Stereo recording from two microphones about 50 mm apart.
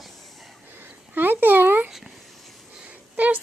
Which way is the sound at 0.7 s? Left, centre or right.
Right.